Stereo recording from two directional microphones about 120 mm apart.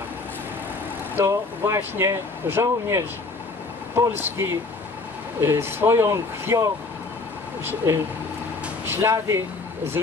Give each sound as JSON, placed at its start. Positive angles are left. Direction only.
{"t": 1.1, "sound": "speech", "side_deg": -20}